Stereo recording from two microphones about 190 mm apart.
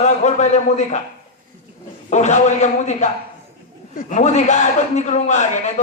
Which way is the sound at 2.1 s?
35° left (ahead or behind).